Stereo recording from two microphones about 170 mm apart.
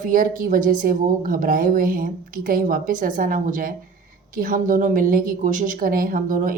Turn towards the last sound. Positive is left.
turn(degrees=-55)  # may be behind; listen again after turning